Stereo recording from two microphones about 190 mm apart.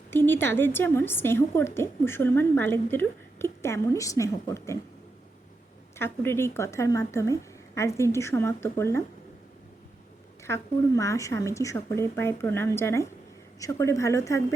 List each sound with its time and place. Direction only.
0.1 s a woman's voice: 10° left (ahead or behind)
6.0 s a woman's voice: 10° left (ahead or behind)
10.4 s a woman's voice: 15° left (ahead or behind)